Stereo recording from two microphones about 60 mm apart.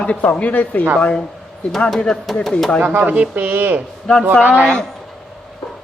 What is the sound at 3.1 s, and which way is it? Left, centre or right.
Speech, right.